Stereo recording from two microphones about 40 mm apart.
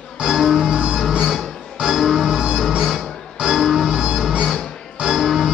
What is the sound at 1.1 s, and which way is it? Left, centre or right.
Music, right.